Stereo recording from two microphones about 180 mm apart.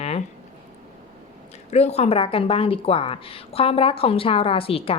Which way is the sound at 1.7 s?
35° left (ahead or behind).